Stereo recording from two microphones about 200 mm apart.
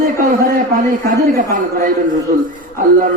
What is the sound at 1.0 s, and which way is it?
A man's voice, 40° right (ahead or behind).